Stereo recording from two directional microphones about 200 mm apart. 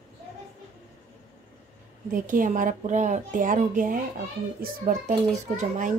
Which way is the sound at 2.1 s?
40° right (ahead or behind).